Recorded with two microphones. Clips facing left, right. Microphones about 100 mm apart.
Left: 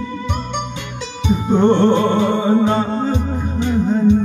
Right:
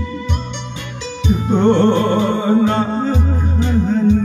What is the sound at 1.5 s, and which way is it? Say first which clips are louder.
Music: even; 15° left (ahead or behind).